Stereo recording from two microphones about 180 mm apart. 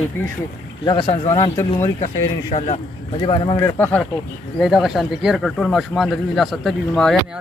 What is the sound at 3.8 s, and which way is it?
Speech, 10° left (ahead or behind).